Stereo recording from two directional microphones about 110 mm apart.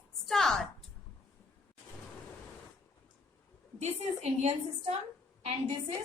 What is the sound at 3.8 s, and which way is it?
A woman's voice, 85° right.